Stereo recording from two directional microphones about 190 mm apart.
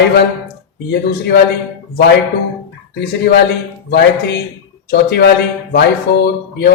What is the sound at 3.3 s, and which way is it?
Speech, 55° left (ahead or behind).